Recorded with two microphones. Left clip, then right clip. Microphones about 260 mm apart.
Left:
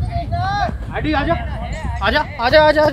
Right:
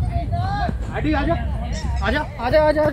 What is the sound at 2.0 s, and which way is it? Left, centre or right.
Speech, left.